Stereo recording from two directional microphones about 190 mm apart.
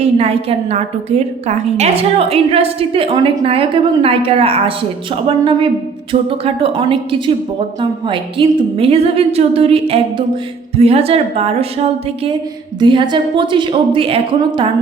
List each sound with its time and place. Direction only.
0.0 s a woman's voice: 35° right (ahead or behind)